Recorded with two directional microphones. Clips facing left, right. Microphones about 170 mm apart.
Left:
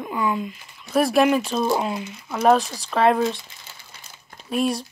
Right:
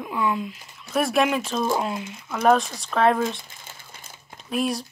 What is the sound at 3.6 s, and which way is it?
Crumpling, 50° right (ahead or behind).